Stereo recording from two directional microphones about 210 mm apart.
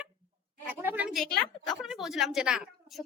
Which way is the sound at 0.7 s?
10° right (ahead or behind).